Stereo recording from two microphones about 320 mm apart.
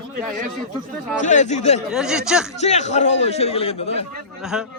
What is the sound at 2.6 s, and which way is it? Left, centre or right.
A man's voice, left.